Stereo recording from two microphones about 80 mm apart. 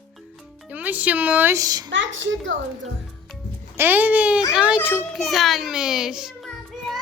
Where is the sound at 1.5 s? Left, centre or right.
Right.